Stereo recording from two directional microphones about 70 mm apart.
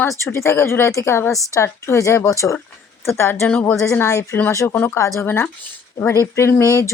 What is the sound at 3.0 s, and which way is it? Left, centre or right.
A woman's voice, left.